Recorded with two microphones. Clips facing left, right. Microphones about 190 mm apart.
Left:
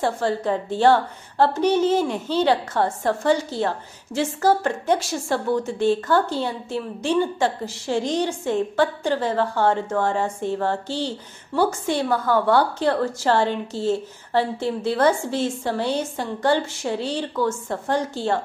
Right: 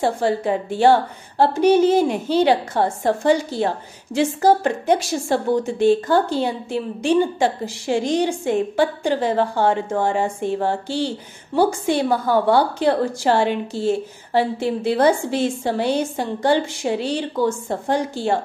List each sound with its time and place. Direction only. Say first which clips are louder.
0.0 s a woman's voice: right 3 dB; 15° right (ahead or behind)